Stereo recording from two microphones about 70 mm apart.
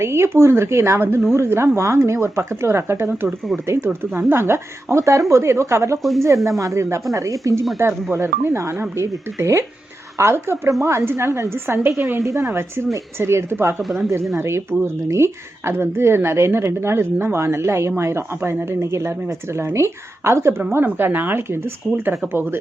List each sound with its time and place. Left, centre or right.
0.0 s speech: right
6.0 s speech: centre
6.2 s speech: right
12.2 s speech: right
13.8 s speech: centre
14.3 s speech: right